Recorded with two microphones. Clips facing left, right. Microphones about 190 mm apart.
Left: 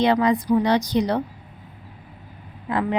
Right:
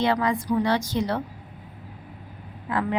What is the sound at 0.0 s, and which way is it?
A woman's voice, 20° left (ahead or behind).